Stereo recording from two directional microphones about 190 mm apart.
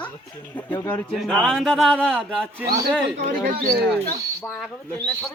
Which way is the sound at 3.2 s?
50° right (ahead or behind).